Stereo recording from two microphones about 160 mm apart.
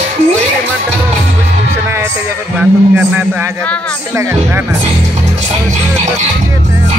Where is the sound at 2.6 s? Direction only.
10° right (ahead or behind).